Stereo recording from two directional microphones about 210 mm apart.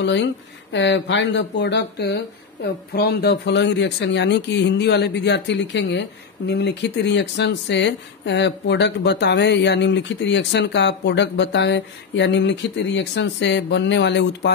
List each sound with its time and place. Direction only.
0.0 s speech: 55° left (ahead or behind)